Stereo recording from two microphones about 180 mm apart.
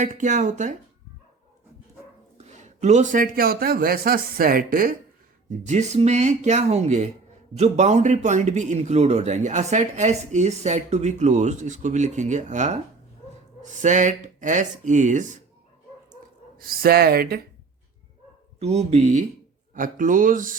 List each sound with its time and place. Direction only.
0.0 s a man's voice: 45° right (ahead or behind)
2.4 s a man's voice: 40° right (ahead or behind)
5.5 s a man's voice: 40° right (ahead or behind)
16.6 s speech: 55° right (ahead or behind)
18.6 s a man's voice: 35° right (ahead or behind)